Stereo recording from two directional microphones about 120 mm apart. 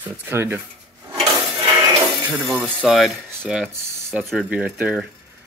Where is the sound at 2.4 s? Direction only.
20° right (ahead or behind).